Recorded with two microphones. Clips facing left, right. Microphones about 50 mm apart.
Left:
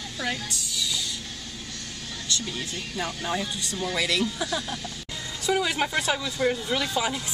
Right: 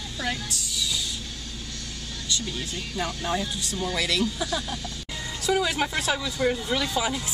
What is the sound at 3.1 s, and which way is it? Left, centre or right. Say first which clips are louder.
Speech: right 1 dB; centre.